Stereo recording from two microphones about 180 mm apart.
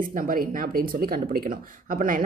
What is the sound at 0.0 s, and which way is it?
A woman's voice, 50° right (ahead or behind).